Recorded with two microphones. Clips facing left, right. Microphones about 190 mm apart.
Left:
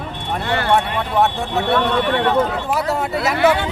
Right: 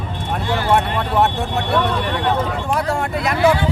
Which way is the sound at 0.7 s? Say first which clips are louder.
Right 1 dB; centre (ahead or behind).